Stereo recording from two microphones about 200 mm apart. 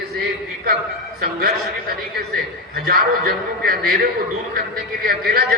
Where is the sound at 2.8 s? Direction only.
45° right (ahead or behind).